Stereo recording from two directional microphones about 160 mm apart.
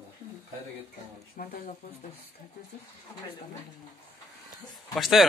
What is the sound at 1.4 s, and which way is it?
Speech, 60° left (ahead or behind).